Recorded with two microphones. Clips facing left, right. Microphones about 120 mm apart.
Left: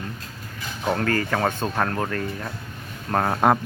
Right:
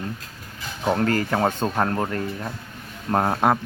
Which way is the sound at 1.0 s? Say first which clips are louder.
Right 2 dB; 25° right (ahead or behind).